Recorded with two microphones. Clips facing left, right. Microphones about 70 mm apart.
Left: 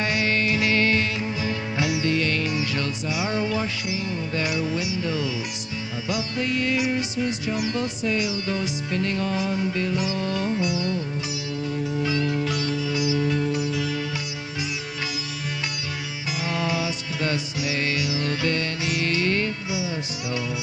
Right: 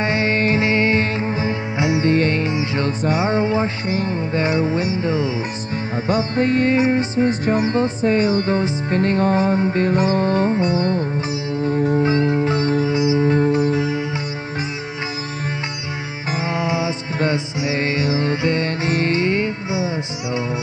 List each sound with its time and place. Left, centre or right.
0.0 s music: right
16.3 s music: right